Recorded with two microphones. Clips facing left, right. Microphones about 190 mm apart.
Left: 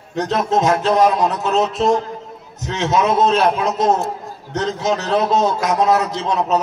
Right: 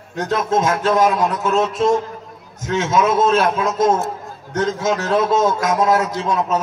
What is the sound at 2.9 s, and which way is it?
Speech, 25° left (ahead or behind).